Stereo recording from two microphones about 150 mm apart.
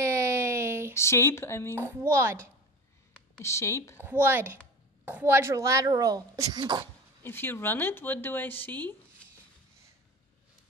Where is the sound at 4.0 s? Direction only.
15° right (ahead or behind).